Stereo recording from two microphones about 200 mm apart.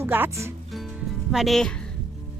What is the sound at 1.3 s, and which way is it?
Speech, centre (ahead or behind).